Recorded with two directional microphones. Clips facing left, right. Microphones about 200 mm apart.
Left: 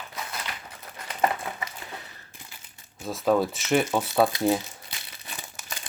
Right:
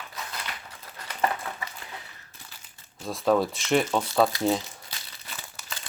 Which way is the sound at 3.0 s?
Centre (ahead or behind).